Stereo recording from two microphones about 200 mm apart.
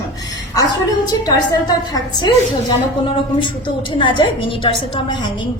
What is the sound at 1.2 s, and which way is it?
A woman's voice, 20° left (ahead or behind).